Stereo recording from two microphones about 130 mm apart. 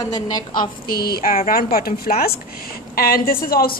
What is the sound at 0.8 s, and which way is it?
A woman's voice, 90° left.